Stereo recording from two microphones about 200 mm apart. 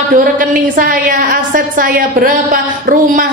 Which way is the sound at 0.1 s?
45° right (ahead or behind).